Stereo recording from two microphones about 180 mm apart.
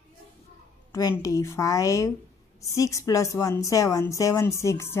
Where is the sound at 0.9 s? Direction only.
20° left (ahead or behind).